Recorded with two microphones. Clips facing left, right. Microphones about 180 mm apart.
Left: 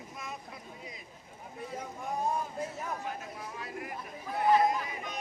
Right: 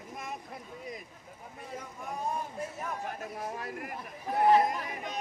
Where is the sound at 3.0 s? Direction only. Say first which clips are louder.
Right 2 dB; 45° right (ahead or behind).